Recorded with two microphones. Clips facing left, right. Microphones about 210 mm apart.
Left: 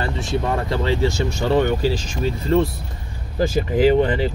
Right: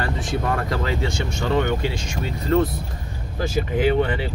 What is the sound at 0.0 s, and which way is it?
Speech, 25° left (ahead or behind).